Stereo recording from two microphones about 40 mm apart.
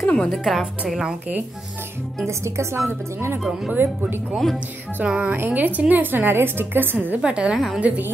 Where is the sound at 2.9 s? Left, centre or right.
Right.